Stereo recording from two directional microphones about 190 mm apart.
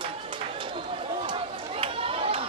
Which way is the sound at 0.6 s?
25° right (ahead or behind).